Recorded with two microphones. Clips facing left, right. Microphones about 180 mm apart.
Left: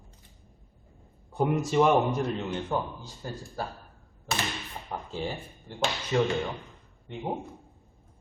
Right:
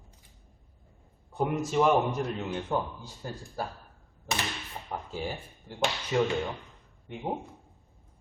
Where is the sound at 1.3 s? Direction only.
Centre (ahead or behind).